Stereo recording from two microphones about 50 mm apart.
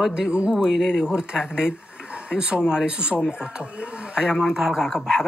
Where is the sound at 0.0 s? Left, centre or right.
Centre.